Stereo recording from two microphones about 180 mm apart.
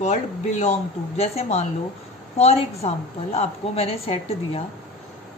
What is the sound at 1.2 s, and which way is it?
A woman's voice, 35° left (ahead or behind).